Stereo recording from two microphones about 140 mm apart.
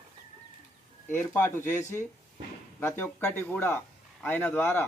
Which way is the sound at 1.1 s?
15° left (ahead or behind).